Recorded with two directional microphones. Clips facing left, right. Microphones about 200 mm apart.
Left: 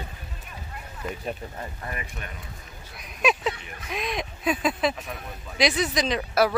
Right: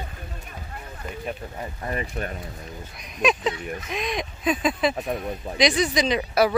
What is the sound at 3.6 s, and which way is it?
Speech, 45° right (ahead or behind).